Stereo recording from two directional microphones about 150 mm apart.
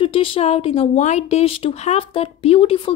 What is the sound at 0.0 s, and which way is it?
A woman's voice, 35° left (ahead or behind).